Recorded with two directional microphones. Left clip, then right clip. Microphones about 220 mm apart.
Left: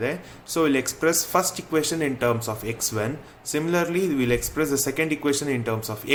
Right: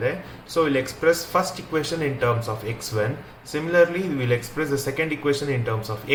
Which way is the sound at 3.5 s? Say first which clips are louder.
Right 4 dB; 55° left (ahead or behind).